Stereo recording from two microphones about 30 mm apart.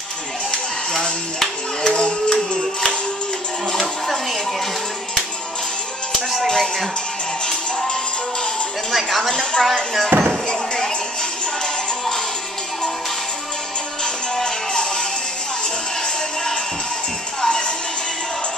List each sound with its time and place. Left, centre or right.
0.5 s music: left
1.4 s a sound: left
6.4 s speech: centre
8.9 s a woman's voice: centre
9.3 s a woman's voice: left
10.1 s speech: right
14.0 s music: left
17.4 s music: left